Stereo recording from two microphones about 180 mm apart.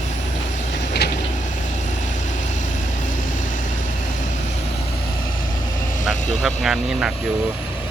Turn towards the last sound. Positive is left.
turn(degrees=0)  # may be behind; listen again after turning